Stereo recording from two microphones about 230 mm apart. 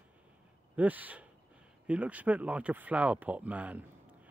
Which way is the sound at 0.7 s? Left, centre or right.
Centre.